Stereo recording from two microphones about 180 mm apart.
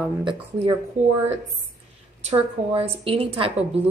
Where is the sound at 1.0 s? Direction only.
40° right (ahead or behind).